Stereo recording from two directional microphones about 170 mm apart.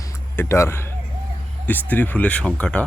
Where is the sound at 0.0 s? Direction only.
15° left (ahead or behind).